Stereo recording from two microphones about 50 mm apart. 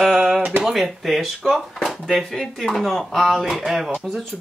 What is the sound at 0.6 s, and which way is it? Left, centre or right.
Speech, centre.